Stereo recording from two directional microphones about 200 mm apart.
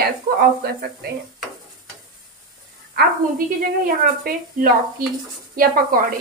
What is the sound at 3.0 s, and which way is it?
A woman's voice, 45° right (ahead or behind).